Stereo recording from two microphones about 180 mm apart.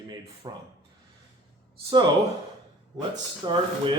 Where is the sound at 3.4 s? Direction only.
25° right (ahead or behind).